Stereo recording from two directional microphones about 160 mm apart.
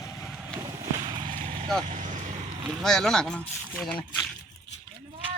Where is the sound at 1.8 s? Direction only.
50° right (ahead or behind).